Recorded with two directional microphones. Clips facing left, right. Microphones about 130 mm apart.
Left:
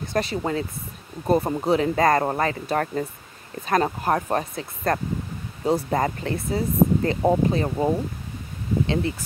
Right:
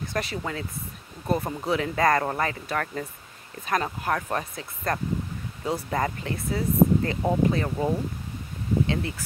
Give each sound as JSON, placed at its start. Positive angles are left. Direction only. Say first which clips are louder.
{"t": 0.0, "sound": "speech", "louder": "left 5 dB", "side_deg": 25}